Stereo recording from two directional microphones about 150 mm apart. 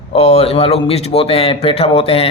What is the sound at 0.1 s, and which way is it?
A man's voice, 40° left (ahead or behind).